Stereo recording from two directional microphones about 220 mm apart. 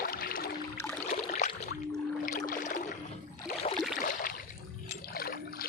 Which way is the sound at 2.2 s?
40° left (ahead or behind).